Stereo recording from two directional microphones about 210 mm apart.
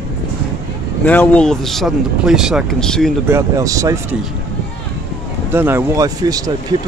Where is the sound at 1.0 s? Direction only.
10° left (ahead or behind).